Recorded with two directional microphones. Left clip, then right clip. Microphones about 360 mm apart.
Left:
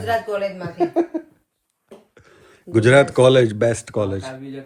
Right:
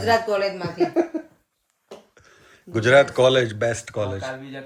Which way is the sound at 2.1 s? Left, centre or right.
Centre.